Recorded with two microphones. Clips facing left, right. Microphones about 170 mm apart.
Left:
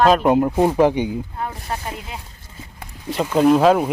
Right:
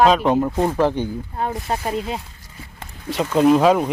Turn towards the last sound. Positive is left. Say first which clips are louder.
# even
turn(degrees=0)  # may be behind; listen again after turning